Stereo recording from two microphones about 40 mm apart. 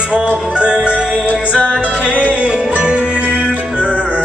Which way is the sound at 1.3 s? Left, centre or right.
Left.